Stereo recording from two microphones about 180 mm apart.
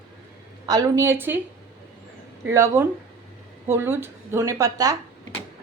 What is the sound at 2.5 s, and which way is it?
A woman's voice, 15° right (ahead or behind).